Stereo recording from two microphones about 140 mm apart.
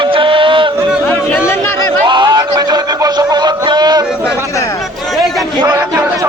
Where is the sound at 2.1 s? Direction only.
35° right (ahead or behind).